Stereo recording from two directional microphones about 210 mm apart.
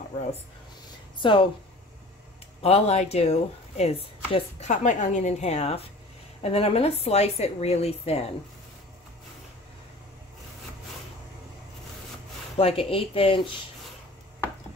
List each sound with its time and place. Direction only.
1.1 s speech: 25° left (ahead or behind)
2.6 s a woman's voice: 30° left (ahead or behind)
12.5 s a woman's voice: 25° left (ahead or behind)